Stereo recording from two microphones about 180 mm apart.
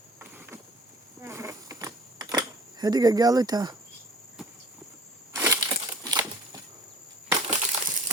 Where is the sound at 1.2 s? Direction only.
15° right (ahead or behind).